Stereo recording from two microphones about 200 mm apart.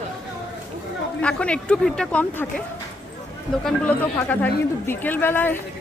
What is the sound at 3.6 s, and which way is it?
Speech, 5° left (ahead or behind).